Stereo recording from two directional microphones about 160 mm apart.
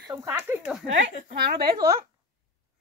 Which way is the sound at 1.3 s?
80° right.